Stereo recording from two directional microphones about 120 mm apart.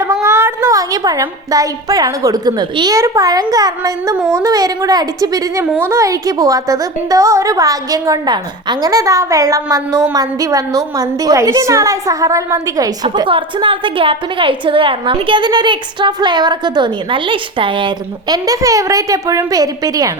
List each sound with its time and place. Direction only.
0.0 s a woman's voice: 25° right (ahead or behind)
5.6 s a child's voice: 15° right (ahead or behind)
5.9 s a woman's voice: 30° right (ahead or behind)
13.2 s a woman's voice: 45° right (ahead or behind); by 20.1 s 30° right (ahead or behind)